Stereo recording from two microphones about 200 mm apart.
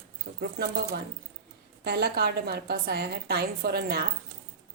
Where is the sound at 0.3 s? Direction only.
55° right (ahead or behind).